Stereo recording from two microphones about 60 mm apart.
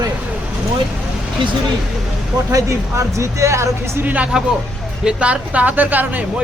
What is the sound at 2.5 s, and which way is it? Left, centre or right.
Speech, right.